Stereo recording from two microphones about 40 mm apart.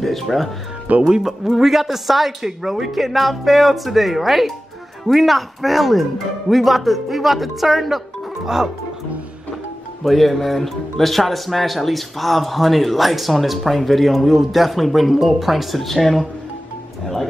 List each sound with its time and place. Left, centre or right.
0.0 s speech: centre
0.9 s speech: right
1.2 s speech: centre
10.0 s speech: centre